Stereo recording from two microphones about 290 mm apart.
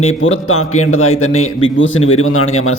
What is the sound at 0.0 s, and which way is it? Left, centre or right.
A man's voice, left.